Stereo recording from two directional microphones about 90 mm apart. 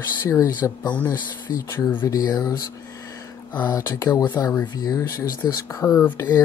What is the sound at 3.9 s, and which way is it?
Speech, 40° left (ahead or behind).